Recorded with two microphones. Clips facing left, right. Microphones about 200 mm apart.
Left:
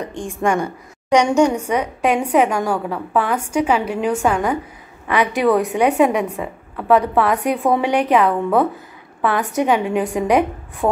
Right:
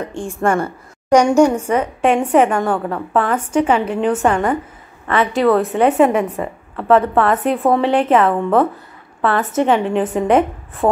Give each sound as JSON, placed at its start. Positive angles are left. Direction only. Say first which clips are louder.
{"t": 0.1, "sound": "a woman's voice", "louder": "right 2 dB", "side_deg": 15}
{"t": 1.1, "sound": "a woman's voice", "louder": "right 3 dB", "side_deg": -5}
{"t": 1.7, "sound": "a woman's voice", "louder": "right 3 dB", "side_deg": 10}
{"t": 5.9, "sound": "a woman's voice", "louder": "right 3 dB", "side_deg": 0}
{"t": 7.7, "sound": "a woman's voice", "louder": "right 2 dB", "side_deg": 15}
{"t": 8.1, "sound": "a woman's voice", "louder": "right 1 dB", "side_deg": 0}
{"t": 9.2, "sound": "a woman's voice", "louder": "right 2 dB", "side_deg": 15}
{"t": 10.0, "sound": "a woman's voice", "louder": "right 2 dB", "side_deg": 0}